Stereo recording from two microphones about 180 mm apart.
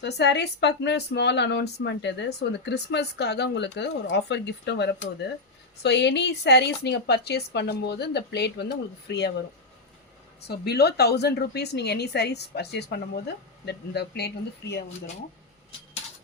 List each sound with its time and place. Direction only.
0.0 s speech: 70° left (ahead or behind)
10.4 s a woman's voice: 65° left (ahead or behind)